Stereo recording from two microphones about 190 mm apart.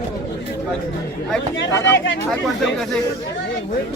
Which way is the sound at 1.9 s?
70° left (ahead or behind).